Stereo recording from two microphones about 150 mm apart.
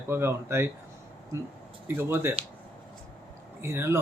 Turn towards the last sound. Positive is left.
turn(degrees=-15)  # may be behind; listen again after turning